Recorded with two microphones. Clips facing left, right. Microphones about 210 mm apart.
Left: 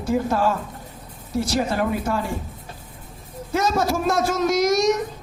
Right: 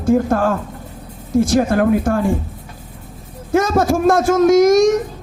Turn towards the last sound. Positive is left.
turn(degrees=-50)  # may be behind; listen again after turning